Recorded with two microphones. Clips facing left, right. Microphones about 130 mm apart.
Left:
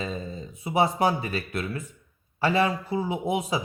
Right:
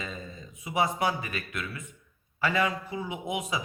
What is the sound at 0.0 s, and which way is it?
Speech, 30° left (ahead or behind).